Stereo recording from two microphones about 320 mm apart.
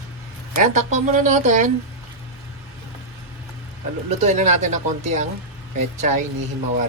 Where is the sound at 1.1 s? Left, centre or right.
Right.